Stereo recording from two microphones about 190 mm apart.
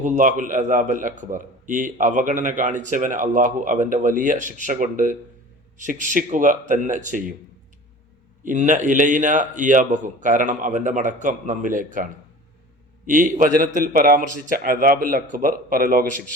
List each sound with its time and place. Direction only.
0.0 s a man's voice: 40° right (ahead or behind)
8.4 s a man's voice: 40° right (ahead or behind)
13.1 s a man's voice: 45° right (ahead or behind)